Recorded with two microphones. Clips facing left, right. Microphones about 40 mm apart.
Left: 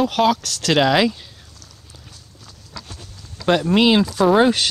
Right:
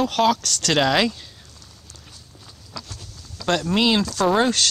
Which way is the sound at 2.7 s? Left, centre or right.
Left.